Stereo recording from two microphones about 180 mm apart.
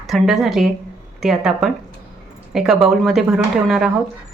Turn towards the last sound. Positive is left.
turn(degrees=0)  # may be behind; listen again after turning